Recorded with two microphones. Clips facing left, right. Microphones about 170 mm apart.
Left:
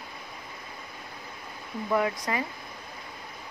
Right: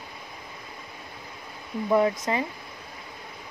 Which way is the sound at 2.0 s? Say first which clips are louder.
Right 4 dB; 25° right (ahead or behind).